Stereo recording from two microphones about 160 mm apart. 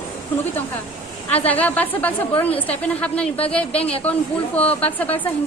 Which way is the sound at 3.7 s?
40° left (ahead or behind).